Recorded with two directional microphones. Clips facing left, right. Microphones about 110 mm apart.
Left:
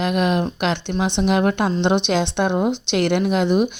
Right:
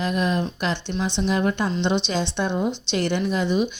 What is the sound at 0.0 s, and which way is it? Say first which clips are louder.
Speech: left 4 dB; 70° left (ahead or behind).